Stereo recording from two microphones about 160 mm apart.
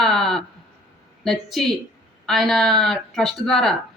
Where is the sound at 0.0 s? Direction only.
Centre (ahead or behind).